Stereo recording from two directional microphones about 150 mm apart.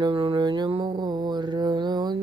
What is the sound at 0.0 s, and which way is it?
Mantra, 35° right (ahead or behind).